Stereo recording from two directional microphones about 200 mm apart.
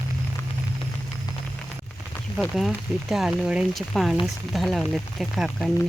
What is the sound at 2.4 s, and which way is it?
Speech, centre (ahead or behind).